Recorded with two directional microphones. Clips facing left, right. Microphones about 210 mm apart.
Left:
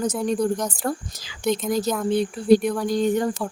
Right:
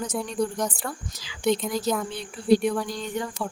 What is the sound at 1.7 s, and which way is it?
Speech, 45° left (ahead or behind).